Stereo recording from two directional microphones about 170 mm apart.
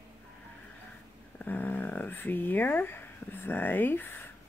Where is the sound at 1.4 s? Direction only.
10° left (ahead or behind).